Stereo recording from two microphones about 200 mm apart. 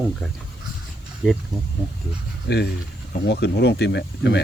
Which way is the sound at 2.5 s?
60° left (ahead or behind).